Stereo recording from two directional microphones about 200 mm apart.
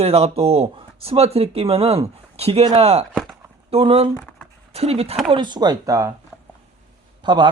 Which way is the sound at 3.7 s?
30° right (ahead or behind).